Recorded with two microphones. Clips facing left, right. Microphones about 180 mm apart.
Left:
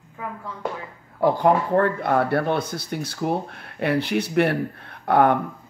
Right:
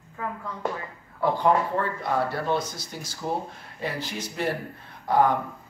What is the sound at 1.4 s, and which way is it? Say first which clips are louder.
Speech: left 4 dB; 60° left (ahead or behind).